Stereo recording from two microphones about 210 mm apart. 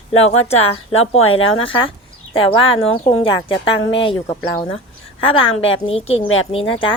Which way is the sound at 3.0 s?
30° left (ahead or behind).